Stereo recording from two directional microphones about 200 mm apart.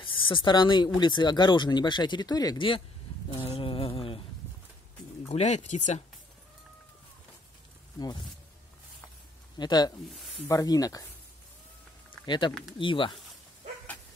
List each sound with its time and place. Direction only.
0.0 s speech: 25° left (ahead or behind)
3.3 s a sound: 30° left (ahead or behind)
5.3 s speech: 35° left (ahead or behind)
9.6 s speech: 20° left (ahead or behind)
10.0 s speech: centre (ahead or behind)
10.4 s speech: 15° left (ahead or behind)
12.3 s speech: 25° left (ahead or behind)